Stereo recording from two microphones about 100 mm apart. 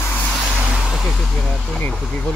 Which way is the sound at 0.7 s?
5° right (ahead or behind).